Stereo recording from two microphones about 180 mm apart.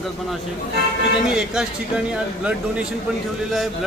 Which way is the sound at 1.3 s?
5° right (ahead or behind).